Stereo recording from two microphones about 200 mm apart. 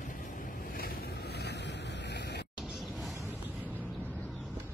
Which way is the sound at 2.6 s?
Centre (ahead or behind).